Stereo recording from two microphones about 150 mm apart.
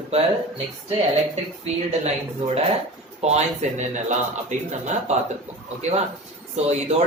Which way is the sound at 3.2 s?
45° right (ahead or behind).